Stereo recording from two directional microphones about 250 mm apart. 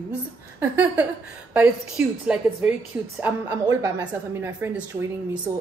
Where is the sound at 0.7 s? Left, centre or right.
Centre.